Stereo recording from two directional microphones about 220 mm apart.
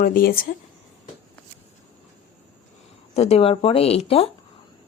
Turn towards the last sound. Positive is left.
turn(degrees=25)  # may be behind; listen again after turning